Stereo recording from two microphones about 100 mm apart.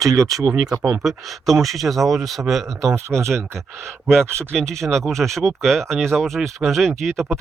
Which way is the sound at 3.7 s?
5° left (ahead or behind).